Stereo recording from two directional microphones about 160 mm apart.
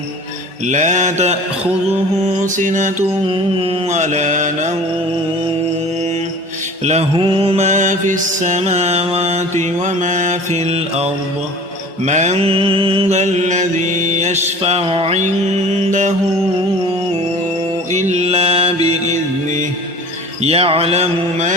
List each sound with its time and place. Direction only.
0.6 s mantra: 50° right (ahead or behind)
6.8 s mantra: 40° right (ahead or behind)
15.9 s mantra: 50° right (ahead or behind)
17.9 s mantra: 45° right (ahead or behind)
20.4 s a sound: 40° right (ahead or behind)